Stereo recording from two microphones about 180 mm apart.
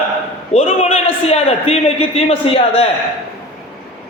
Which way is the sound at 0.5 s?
35° left (ahead or behind).